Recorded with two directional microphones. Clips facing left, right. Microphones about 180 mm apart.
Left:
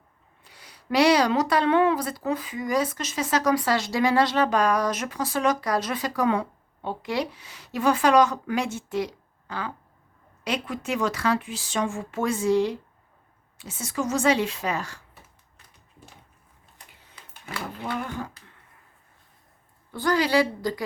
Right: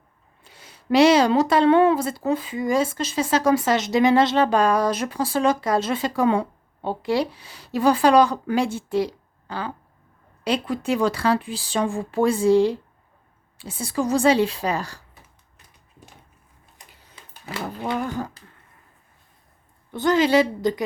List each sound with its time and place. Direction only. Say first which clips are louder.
0.4 s speech: right 7 dB; 25° right (ahead or behind)
18.4 s throat clearing: right 4 dB; 30° right (ahead or behind)
19.9 s speech: right 4 dB; 20° right (ahead or behind)